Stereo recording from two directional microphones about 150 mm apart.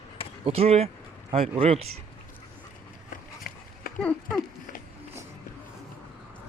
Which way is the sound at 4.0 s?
10° left (ahead or behind).